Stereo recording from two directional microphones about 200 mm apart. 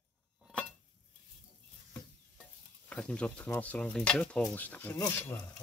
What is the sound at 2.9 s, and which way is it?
Speech, 5° left (ahead or behind).